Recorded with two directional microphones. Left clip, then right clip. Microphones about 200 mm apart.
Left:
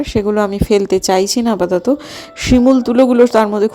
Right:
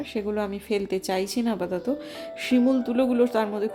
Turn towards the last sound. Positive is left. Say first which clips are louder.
# left 13 dB
turn(degrees=35)  # may be behind; listen again after turning